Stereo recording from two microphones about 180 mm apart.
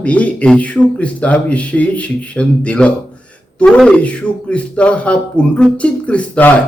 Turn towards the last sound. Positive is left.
turn(degrees=5)  # may be behind; listen again after turning